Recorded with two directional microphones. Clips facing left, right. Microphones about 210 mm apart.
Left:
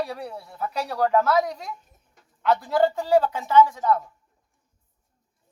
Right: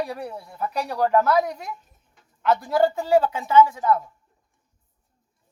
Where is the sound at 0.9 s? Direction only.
10° right (ahead or behind).